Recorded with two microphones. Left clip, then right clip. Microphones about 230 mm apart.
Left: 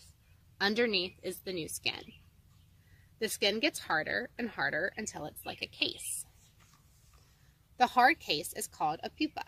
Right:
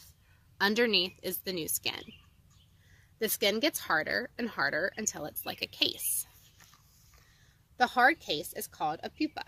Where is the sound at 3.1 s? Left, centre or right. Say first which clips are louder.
Right 2 dB; centre.